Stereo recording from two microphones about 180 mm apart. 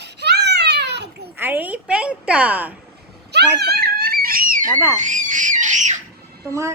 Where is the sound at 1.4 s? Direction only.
10° right (ahead or behind).